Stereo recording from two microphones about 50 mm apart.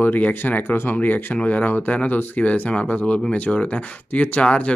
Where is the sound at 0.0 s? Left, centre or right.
Left.